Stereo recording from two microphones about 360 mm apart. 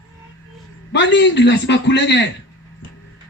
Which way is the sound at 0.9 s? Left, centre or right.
Left.